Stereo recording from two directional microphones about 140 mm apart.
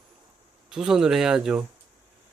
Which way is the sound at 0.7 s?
5° right (ahead or behind).